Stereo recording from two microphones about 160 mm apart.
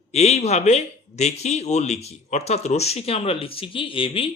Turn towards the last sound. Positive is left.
turn(degrees=35)  # may be behind; listen again after turning